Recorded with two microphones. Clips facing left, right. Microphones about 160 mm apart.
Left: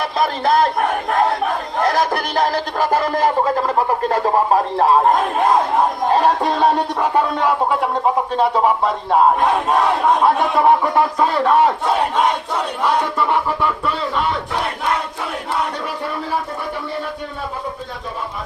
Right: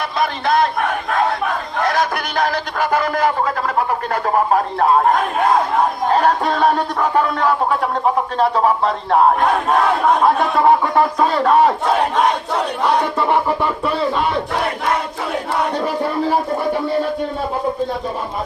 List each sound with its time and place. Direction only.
0.4 s speech: 35° left (ahead or behind)
1.5 s a sound: 35° left (ahead or behind)
4.8 s music: 25° left (ahead or behind)
8.6 s battle cry: 10° left (ahead or behind)
10.2 s speech: centre (ahead or behind)
12.8 s music: 20° right (ahead or behind)